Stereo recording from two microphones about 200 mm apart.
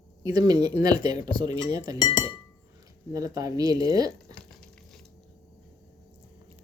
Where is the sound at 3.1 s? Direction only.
15° right (ahead or behind).